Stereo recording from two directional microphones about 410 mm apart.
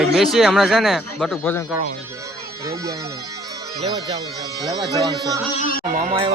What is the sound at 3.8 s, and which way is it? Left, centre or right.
Speech, centre.